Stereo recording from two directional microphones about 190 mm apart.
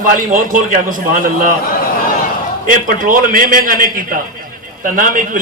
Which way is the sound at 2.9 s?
45° right (ahead or behind).